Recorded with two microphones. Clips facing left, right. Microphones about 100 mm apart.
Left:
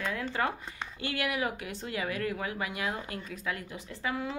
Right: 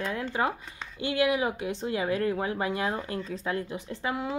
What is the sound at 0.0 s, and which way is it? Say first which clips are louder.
Speech: right 3 dB; 20° right (ahead or behind).